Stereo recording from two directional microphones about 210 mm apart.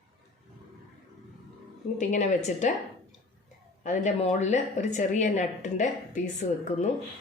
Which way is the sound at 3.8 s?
35° left (ahead or behind).